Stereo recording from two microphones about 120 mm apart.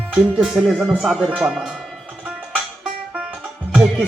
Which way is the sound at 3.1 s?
10° right (ahead or behind).